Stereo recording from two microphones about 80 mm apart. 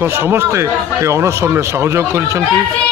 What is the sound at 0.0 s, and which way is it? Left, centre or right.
Speech, right.